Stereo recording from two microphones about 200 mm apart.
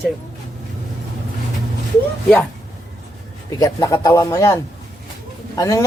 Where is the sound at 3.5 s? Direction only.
20° left (ahead or behind).